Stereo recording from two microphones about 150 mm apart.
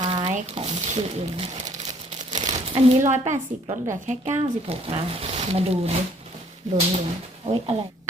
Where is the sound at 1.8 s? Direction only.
50° right (ahead or behind).